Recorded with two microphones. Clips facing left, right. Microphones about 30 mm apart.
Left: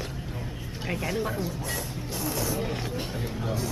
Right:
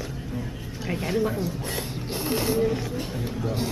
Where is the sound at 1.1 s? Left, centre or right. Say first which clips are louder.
Right 8 dB; centre.